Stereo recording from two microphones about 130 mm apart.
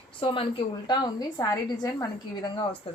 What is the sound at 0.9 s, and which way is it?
A woman's voice, 30° left (ahead or behind).